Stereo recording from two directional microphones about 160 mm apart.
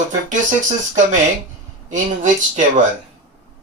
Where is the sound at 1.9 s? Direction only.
50° right (ahead or behind).